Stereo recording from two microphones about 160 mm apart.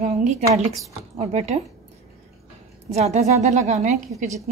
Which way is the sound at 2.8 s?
45° right (ahead or behind).